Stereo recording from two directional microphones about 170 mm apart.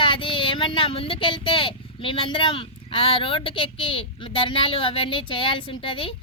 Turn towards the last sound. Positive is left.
turn(degrees=30)  # may be behind; listen again after turning